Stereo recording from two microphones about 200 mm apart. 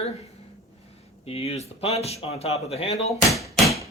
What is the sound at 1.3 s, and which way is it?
Speech, 30° left (ahead or behind).